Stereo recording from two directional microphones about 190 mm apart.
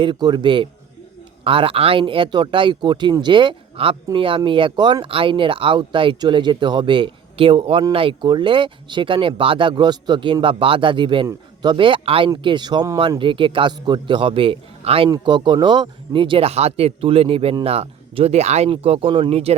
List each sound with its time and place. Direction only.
0.0 s a man's voice: 25° right (ahead or behind)